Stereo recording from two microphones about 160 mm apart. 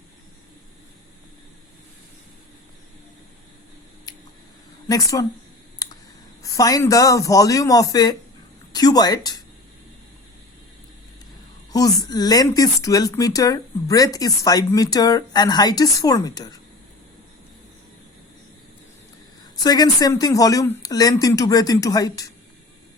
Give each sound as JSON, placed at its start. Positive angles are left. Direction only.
{"t": 4.1, "sound": "a sound", "side_deg": 25}
{"t": 4.9, "sound": "speech", "side_deg": 20}
{"t": 6.4, "sound": "speech", "side_deg": 20}
{"t": 11.7, "sound": "speech", "side_deg": 20}
{"t": 19.6, "sound": "speech", "side_deg": 25}